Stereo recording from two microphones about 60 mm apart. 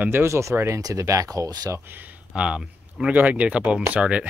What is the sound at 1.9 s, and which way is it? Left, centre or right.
Speech, right.